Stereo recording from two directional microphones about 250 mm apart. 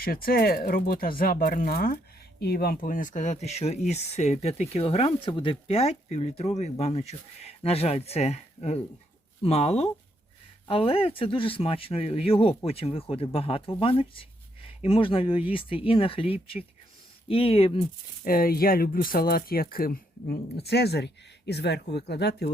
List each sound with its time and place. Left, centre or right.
0.0 s speech: left
18.3 s speech: left